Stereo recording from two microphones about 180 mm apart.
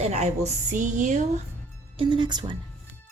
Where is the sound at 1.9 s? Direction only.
25° right (ahead or behind).